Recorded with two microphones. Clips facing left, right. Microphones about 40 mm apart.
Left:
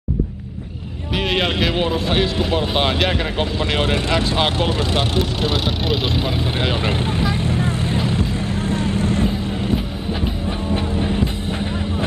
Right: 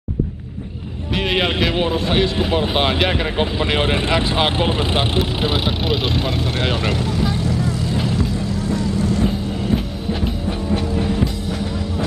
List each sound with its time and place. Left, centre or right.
1.1 s speech: centre
5.9 s speech: centre
6.8 s speech: left
7.3 s vehicle: left
10.7 s music: left